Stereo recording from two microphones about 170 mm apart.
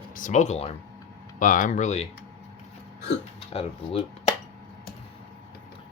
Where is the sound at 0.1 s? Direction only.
50° left (ahead or behind).